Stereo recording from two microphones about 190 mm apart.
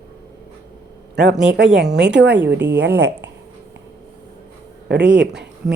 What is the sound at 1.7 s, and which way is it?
Speech, 65° right (ahead or behind).